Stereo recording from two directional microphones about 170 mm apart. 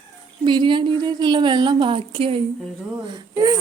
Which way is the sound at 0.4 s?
30° right (ahead or behind).